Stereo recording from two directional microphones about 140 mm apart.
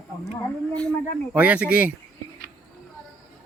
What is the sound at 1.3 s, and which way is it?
Speech, 10° right (ahead or behind).